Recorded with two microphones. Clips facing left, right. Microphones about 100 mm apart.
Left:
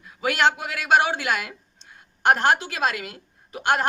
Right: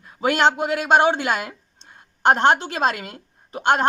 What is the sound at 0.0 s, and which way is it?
A woman's voice, 35° right (ahead or behind).